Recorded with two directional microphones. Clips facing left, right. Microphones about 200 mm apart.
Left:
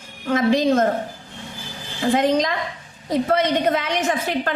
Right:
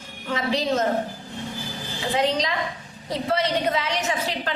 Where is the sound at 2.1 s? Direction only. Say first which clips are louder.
Left 3 dB; 50° left (ahead or behind).